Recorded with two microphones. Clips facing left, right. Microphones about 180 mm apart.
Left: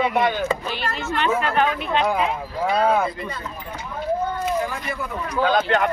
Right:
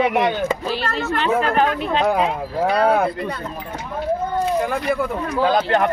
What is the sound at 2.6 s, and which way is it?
Speech, 65° right (ahead or behind).